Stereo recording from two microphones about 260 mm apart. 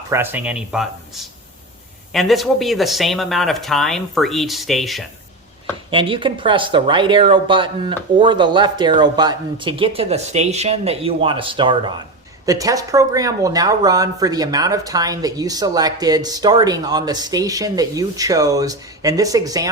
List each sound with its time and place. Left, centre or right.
0.1 s speech: centre
5.9 s speech: centre